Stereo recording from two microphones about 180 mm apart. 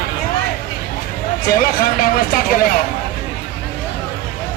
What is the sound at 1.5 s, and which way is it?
Speech, 55° left (ahead or behind).